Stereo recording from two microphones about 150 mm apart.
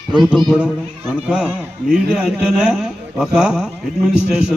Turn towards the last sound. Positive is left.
turn(degrees=-5)  # may be behind; listen again after turning